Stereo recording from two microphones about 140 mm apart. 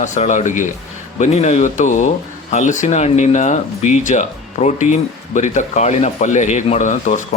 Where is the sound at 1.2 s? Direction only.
50° left (ahead or behind).